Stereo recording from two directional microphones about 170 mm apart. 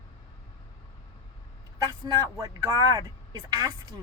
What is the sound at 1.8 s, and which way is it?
A woman's voice, 20° right (ahead or behind).